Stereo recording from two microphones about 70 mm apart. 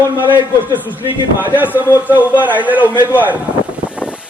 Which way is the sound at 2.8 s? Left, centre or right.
Left.